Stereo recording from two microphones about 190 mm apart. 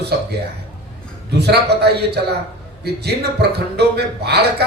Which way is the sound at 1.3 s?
60° right (ahead or behind).